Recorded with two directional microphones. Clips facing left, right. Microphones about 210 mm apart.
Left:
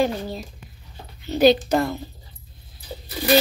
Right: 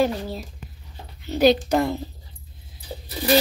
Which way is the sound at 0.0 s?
5° right (ahead or behind).